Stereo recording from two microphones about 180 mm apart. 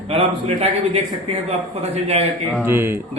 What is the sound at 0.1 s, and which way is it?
Speech, 35° right (ahead or behind).